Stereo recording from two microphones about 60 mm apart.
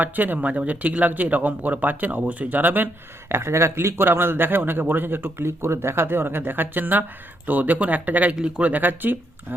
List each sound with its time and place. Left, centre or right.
0.0 s speech: right
3.2 s a man's voice: right